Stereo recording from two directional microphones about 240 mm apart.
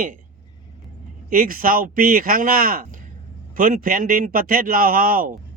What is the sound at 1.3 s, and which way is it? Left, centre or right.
A man's voice, right.